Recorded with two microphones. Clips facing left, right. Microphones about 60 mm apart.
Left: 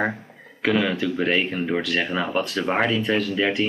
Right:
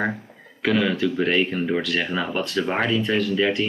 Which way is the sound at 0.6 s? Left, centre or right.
Centre.